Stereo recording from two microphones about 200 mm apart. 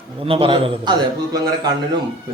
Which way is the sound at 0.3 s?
25° right (ahead or behind).